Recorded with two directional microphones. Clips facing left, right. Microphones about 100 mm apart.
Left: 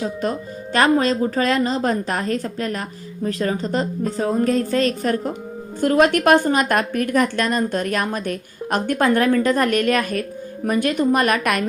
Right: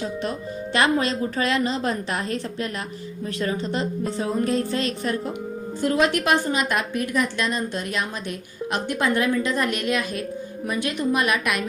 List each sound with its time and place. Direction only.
0.0 s a woman's voice: 40° left (ahead or behind)